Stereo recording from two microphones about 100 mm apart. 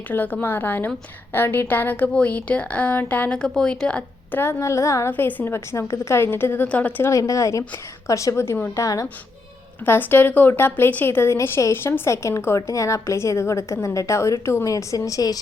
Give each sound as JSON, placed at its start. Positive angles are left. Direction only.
{"t": 0.1, "sound": "a woman's voice", "side_deg": 15}
{"t": 4.4, "sound": "a woman's voice", "side_deg": 25}
{"t": 5.1, "sound": "a woman's voice", "side_deg": 20}
{"t": 7.0, "sound": "a woman's voice", "side_deg": 30}
{"t": 8.7, "sound": "a woman's voice", "side_deg": 35}
{"t": 9.8, "sound": "a woman's voice", "side_deg": 20}